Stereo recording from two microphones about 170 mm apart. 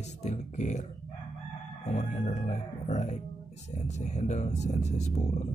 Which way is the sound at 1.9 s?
45° left (ahead or behind).